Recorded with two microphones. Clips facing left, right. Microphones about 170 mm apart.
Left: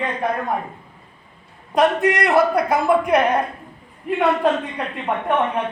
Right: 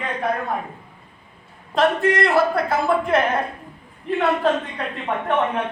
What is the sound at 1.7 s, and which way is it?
Speech, 20° left (ahead or behind).